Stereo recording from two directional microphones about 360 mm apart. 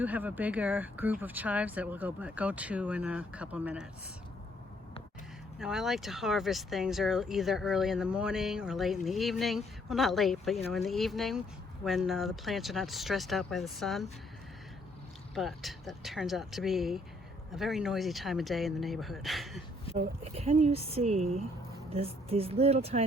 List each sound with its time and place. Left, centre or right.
0.0 s speech: centre
5.5 s speech: centre
15.4 s speech: centre
19.9 s speech: centre
20.3 s speech: centre